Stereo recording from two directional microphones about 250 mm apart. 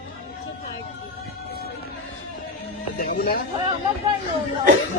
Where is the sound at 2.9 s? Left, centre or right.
Left.